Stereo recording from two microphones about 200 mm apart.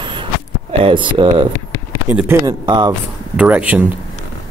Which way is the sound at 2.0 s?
10° right (ahead or behind).